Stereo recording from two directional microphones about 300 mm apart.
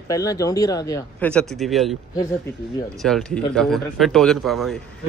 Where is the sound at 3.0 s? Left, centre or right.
Centre.